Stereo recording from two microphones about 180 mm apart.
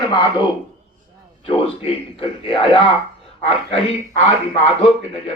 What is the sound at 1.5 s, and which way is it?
Speech, 30° left (ahead or behind).